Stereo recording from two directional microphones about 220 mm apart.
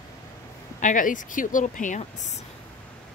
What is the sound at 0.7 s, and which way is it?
Speech, 35° left (ahead or behind).